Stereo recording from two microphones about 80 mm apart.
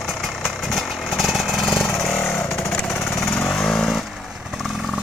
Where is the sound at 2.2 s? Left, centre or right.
Left.